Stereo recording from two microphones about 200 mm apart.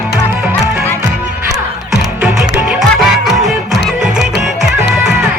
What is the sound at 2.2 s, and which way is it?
Music, 5° right (ahead or behind).